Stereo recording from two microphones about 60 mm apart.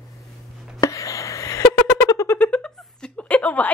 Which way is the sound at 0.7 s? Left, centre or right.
Left.